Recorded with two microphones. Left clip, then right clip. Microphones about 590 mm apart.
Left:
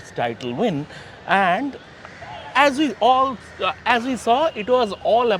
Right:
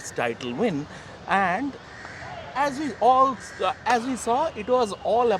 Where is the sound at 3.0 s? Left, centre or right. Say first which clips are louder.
Right 1 dB; centre.